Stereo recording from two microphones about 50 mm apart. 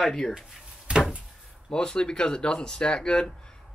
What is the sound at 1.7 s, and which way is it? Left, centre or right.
Speech, centre.